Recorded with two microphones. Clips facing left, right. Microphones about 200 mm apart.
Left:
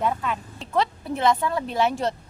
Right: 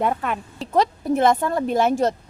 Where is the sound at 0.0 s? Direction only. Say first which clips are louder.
Right 3 dB; 60° right (ahead or behind).